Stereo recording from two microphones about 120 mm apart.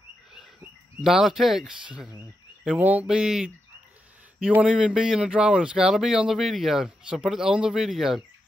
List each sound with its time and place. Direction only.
1.0 s speech: centre (ahead or behind)
2.6 s a sound: 10° right (ahead or behind)
4.4 s speech: 10° right (ahead or behind)